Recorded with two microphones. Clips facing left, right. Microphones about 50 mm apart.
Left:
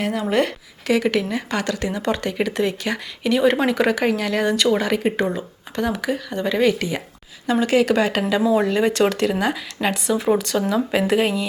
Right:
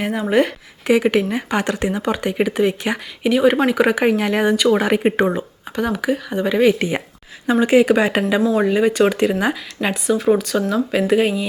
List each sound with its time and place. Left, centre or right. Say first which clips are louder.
0.0 s speech: right 3 dB; centre
0.9 s speech: right 4 dB; right
2.0 s speech: right 3 dB; centre
4.5 s speech: right 2 dB; centre
4.8 s speech: right 4 dB; right
5.7 s speech: right 3 dB; centre
6.7 s speech: right 4 dB; right
8.4 s speech: left 1 dB; centre
8.6 s speech: right 3 dB; centre